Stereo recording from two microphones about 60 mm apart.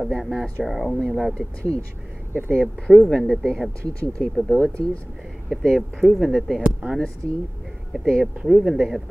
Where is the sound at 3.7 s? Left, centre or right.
Centre.